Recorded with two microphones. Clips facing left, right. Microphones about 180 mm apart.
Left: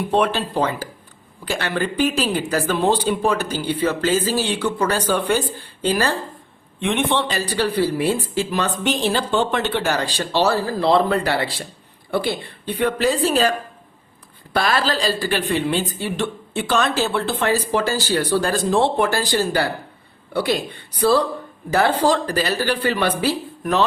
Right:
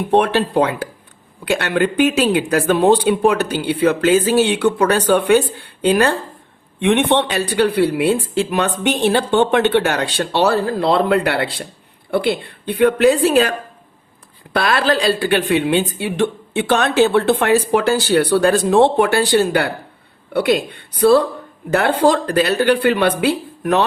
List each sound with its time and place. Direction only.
0.1 s a woman's voice: 60° right (ahead or behind)
14.5 s a woman's voice: 60° right (ahead or behind)
21.7 s a woman's voice: 60° right (ahead or behind)